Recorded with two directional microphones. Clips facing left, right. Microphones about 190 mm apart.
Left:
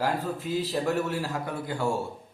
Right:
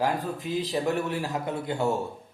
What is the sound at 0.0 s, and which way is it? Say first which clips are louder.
A man's voice: right 1 dB; 15° right (ahead or behind).